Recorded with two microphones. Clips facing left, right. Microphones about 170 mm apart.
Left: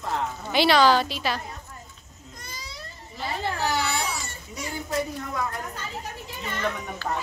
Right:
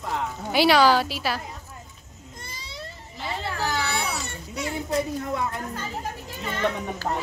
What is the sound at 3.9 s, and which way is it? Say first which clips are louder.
Baby cry: right 1 dB; 65° right (ahead or behind).